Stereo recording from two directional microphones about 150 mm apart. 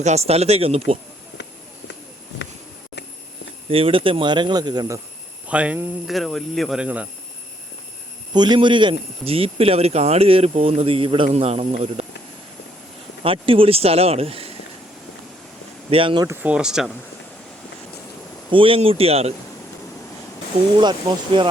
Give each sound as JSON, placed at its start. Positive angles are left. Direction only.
{"t": 0.0, "sound": "speech", "side_deg": -45}
{"t": 3.7, "sound": "speech", "side_deg": -40}
{"t": 5.5, "sound": "speech", "side_deg": -10}
{"t": 8.3, "sound": "speech", "side_deg": -30}
{"t": 13.2, "sound": "speech", "side_deg": -35}
{"t": 15.9, "sound": "speech", "side_deg": -35}
{"t": 16.2, "sound": "speech", "side_deg": -15}
{"t": 18.5, "sound": "speech", "side_deg": -35}
{"t": 21.3, "sound": "speech", "side_deg": -35}